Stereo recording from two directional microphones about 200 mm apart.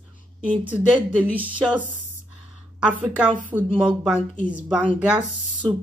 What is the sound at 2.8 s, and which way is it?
Speech, 5° right (ahead or behind).